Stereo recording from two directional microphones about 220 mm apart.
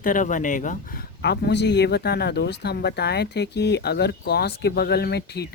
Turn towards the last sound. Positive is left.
turn(degrees=50)  # may be behind; listen again after turning